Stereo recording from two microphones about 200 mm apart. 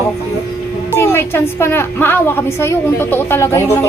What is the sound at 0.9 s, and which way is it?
A woman's voice, 10° left (ahead or behind).